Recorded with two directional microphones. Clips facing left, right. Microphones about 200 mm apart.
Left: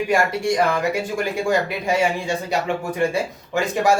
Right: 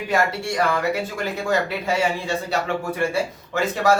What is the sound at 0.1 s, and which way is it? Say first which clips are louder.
Speech: left 1 dB; 15° left (ahead or behind).